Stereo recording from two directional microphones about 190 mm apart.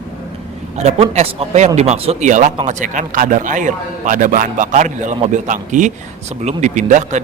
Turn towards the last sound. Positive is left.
turn(degrees=-40)  # may be behind; listen again after turning